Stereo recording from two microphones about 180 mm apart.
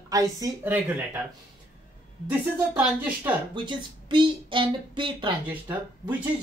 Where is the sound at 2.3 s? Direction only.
10° right (ahead or behind).